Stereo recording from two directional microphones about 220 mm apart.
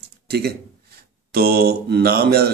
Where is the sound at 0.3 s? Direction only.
45° right (ahead or behind).